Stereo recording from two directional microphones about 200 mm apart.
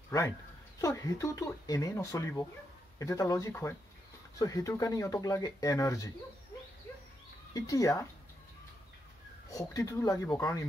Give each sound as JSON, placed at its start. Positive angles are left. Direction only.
{"t": 0.7, "sound": "speech", "side_deg": 15}
{"t": 7.5, "sound": "speech", "side_deg": 15}
{"t": 9.5, "sound": "speech", "side_deg": 15}